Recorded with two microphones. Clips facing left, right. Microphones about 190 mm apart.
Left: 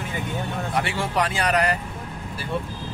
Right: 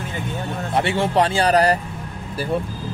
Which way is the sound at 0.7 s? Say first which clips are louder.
Right 7 dB; 25° right (ahead or behind).